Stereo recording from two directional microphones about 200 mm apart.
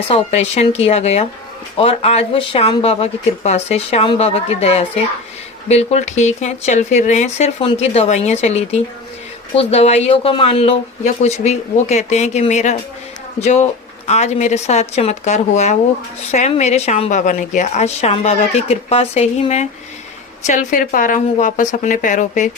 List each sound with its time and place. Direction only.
0.1 s speech: 35° left (ahead or behind)